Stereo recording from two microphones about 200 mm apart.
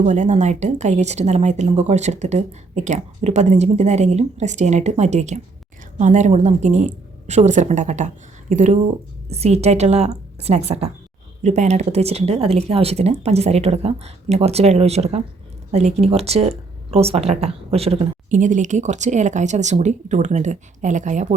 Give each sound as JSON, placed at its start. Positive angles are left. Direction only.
{"t": 0.0, "sound": "speech", "side_deg": -40}